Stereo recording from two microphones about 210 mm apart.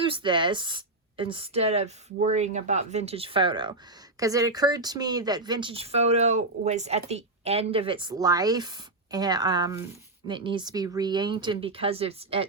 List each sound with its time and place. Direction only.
0.0 s a woman's voice: 25° right (ahead or behind)